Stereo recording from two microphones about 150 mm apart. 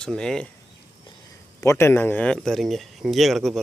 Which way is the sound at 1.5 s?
20° left (ahead or behind).